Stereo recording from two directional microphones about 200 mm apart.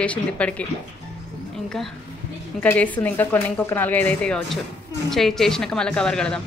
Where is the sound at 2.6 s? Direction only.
10° left (ahead or behind).